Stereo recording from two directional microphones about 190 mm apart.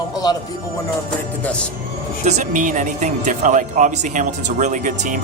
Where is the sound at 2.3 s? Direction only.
40° right (ahead or behind).